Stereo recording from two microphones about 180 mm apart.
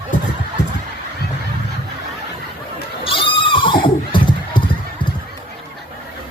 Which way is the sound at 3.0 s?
30° left (ahead or behind).